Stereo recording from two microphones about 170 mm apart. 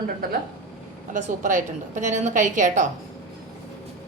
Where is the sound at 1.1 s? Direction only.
45° right (ahead or behind).